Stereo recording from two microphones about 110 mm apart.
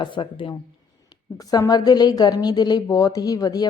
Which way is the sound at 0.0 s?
50° left (ahead or behind).